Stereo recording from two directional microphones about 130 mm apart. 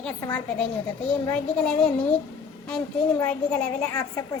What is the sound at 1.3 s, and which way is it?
A child's voice, 10° left (ahead or behind).